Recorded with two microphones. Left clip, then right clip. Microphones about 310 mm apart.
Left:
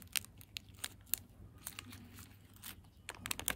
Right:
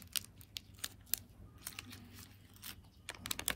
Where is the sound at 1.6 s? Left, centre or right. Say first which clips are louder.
Right 1 dB; centre.